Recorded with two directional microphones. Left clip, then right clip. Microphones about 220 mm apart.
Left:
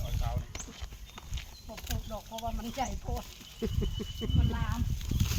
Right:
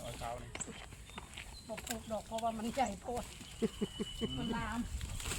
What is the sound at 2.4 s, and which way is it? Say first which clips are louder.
Speech: even; 10° right (ahead or behind).